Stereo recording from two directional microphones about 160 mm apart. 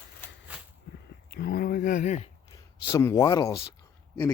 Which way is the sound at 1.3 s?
75° left (ahead or behind).